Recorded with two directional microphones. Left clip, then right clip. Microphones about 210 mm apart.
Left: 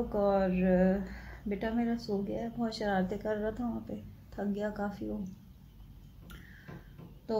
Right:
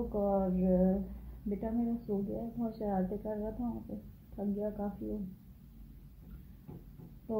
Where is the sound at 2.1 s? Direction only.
25° left (ahead or behind).